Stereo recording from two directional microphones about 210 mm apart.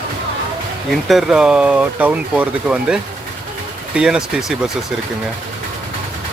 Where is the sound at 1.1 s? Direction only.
Centre (ahead or behind).